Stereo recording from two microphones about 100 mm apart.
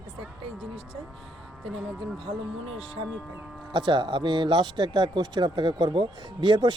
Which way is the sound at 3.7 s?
50° right (ahead or behind).